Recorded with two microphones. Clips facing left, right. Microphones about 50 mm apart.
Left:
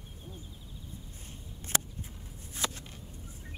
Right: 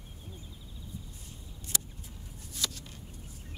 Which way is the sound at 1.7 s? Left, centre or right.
Left.